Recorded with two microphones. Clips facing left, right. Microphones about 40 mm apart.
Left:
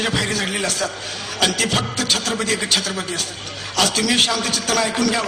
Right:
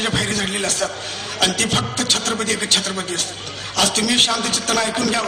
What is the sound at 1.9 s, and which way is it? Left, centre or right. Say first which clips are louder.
Speech: even; right.